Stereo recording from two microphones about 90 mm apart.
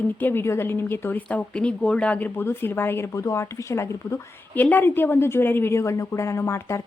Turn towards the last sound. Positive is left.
turn(degrees=35)  # may be behind; listen again after turning